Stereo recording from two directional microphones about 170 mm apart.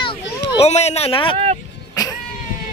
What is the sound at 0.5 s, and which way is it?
Speech, 40° left (ahead or behind).